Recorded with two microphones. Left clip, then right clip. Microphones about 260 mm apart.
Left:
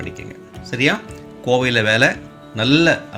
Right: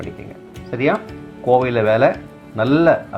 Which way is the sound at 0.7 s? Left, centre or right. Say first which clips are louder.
Even; left.